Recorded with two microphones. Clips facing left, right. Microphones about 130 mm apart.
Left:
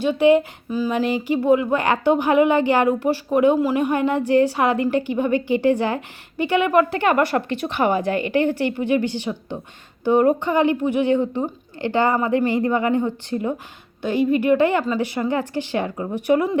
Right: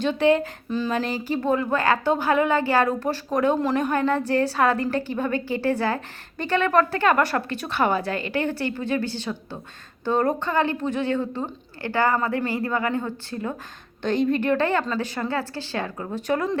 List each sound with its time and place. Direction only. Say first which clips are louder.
0.0 s a woman's voice: left 4 dB; 15° left (ahead or behind)